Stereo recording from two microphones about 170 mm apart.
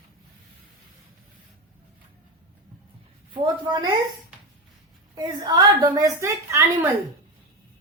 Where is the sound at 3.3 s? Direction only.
30° right (ahead or behind).